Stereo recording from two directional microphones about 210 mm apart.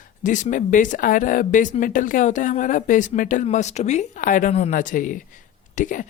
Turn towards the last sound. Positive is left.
turn(degrees=35)  # may be behind; listen again after turning